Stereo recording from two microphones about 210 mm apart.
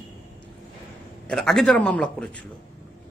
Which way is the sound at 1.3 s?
Centre (ahead or behind).